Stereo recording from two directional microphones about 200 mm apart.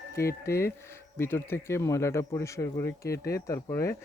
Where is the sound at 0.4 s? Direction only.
15° left (ahead or behind).